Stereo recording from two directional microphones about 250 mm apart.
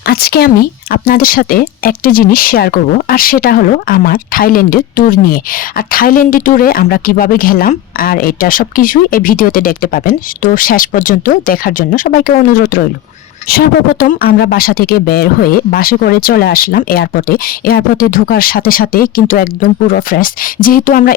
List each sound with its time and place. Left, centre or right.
0.0 s speech: left